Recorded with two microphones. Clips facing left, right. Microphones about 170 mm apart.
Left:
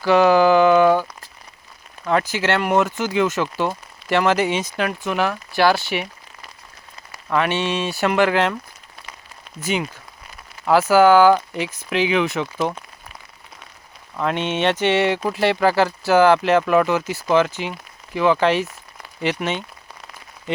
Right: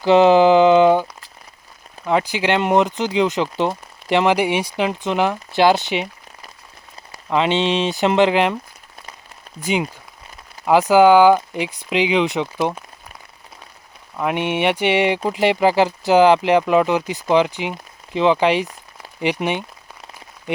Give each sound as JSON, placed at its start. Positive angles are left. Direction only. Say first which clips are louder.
{"t": 0.0, "sound": "a sound", "louder": "right 3 dB", "side_deg": -20}
{"t": 2.0, "sound": "speech", "louder": "right 1 dB", "side_deg": -15}
{"t": 7.3, "sound": "speech", "louder": "right 3 dB", "side_deg": -20}
{"t": 9.6, "sound": "speech", "louder": "right 2 dB", "side_deg": -15}
{"t": 14.2, "sound": "speech", "louder": "right 1 dB", "side_deg": -15}